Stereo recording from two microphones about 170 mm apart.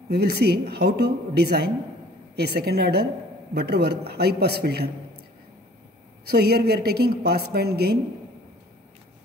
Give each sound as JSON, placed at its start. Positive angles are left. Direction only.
{"t": 0.1, "sound": "speech", "side_deg": -70}
{"t": 6.2, "sound": "speech", "side_deg": -70}